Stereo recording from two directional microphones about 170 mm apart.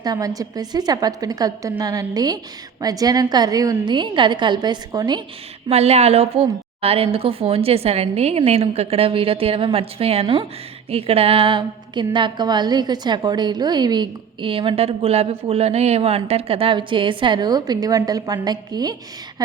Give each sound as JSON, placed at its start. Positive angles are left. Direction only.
{"t": 0.0, "sound": "a woman's voice", "side_deg": -20}
{"t": 5.6, "sound": "a woman's voice", "side_deg": -35}